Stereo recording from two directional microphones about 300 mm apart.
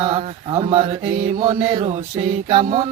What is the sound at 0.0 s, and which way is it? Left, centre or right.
Mantra, centre.